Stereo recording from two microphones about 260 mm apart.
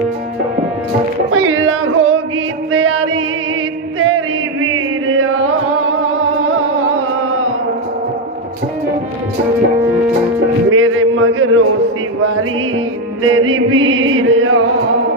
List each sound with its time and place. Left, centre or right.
1.3 s music: right
5.2 s music: right
10.7 s music: right
13.2 s music: right